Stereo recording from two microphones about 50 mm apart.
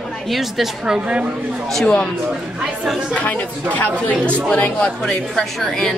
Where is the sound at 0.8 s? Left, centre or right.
Right.